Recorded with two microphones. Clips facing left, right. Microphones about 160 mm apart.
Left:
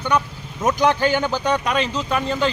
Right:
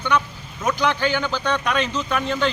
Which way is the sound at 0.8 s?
45° left (ahead or behind).